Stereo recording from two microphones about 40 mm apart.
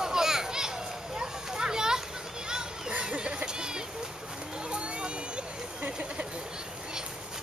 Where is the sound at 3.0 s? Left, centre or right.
Right.